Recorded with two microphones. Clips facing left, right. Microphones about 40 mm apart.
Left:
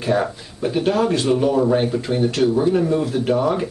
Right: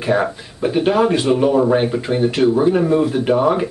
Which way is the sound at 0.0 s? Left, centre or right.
Centre.